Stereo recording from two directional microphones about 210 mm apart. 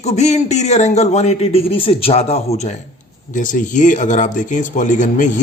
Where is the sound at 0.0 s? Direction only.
30° left (ahead or behind).